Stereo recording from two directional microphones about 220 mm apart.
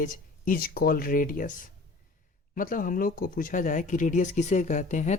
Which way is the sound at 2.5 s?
40° left (ahead or behind).